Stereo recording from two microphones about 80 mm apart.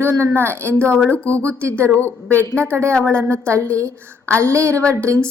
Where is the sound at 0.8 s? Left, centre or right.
Centre.